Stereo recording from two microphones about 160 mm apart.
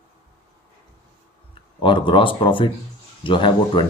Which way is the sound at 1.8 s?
30° left (ahead or behind).